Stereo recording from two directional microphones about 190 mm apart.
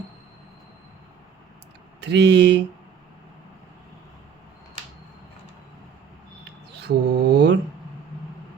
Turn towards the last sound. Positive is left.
turn(degrees=-65)  # may be behind; listen again after turning